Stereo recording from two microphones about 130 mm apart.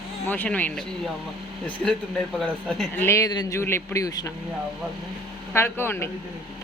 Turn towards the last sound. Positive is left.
turn(degrees=20)  # may be behind; listen again after turning